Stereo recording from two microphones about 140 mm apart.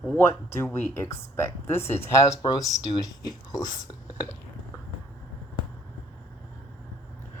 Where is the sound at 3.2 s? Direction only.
30° left (ahead or behind).